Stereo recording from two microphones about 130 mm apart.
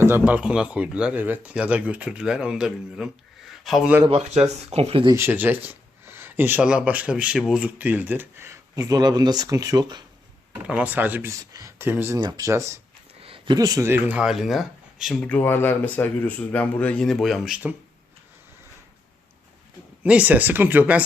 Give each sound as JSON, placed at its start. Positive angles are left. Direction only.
{"t": 0.0, "sound": "speech", "side_deg": -15}
{"t": 4.1, "sound": "speech", "side_deg": -55}
{"t": 5.1, "sound": "speech", "side_deg": -15}
{"t": 10.7, "sound": "speech", "side_deg": -10}
{"t": 13.2, "sound": "a sound", "side_deg": -45}
{"t": 13.6, "sound": "speech", "side_deg": -25}
{"t": 14.2, "sound": "speech", "side_deg": -5}
{"t": 15.2, "sound": "speech", "side_deg": 10}
{"t": 20.0, "sound": "speech", "side_deg": -10}